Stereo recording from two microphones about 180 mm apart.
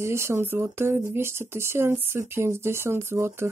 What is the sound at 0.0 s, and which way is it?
Speech, 15° right (ahead or behind).